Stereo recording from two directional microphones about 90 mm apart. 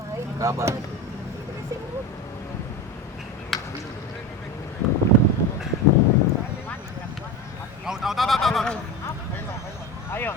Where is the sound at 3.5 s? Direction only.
Centre (ahead or behind).